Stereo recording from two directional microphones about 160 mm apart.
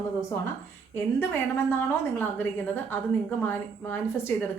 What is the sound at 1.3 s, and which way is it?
Speech, 10° left (ahead or behind).